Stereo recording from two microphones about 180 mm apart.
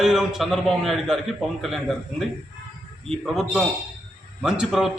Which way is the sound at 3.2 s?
Centre (ahead or behind).